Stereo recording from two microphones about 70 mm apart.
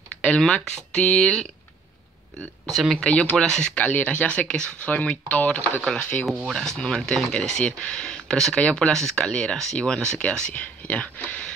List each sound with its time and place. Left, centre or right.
0.2 s speech: centre
2.7 s speech: centre
3.0 s speech: centre
3.7 s speech: left
6.4 s speech: centre